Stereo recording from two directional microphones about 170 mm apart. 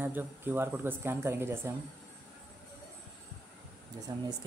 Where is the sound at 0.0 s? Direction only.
10° right (ahead or behind).